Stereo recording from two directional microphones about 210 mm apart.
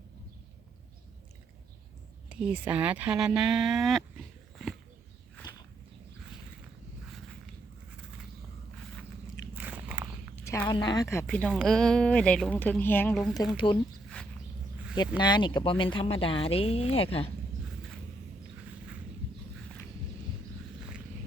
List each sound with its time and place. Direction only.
2.3 s speech: 5° right (ahead or behind)
5.4 s walk: 20° left (ahead or behind)
9.6 s biting: 10° right (ahead or behind)
10.3 s a woman's voice: 15° left (ahead or behind)
13.7 s speech: 25° left (ahead or behind)
15.2 s speech: 20° left (ahead or behind)